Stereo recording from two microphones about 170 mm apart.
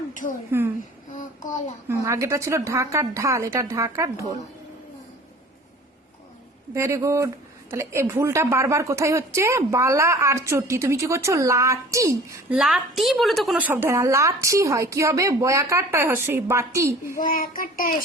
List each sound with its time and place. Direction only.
0.1 s speech: 50° left (ahead or behind)
1.9 s a woman's voice: 20° right (ahead or behind)
6.7 s a woman's voice: 15° right (ahead or behind)
12.5 s a woman's voice: centre (ahead or behind)
17.2 s child singing: 55° left (ahead or behind)